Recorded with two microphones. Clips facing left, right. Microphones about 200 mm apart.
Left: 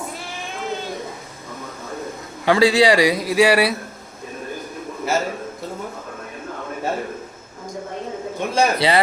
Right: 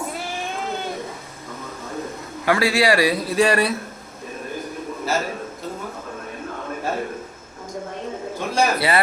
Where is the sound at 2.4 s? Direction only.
20° left (ahead or behind).